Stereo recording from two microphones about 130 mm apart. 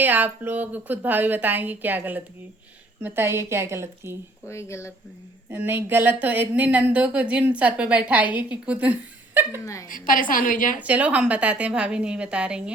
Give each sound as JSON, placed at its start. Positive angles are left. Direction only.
{"t": 0.0, "sound": "a woman's voice", "side_deg": -15}
{"t": 4.4, "sound": "speech", "side_deg": 20}
{"t": 5.5, "sound": "speech", "side_deg": -15}
{"t": 9.9, "sound": "a woman's voice", "side_deg": 90}
{"t": 10.8, "sound": "speech", "side_deg": -10}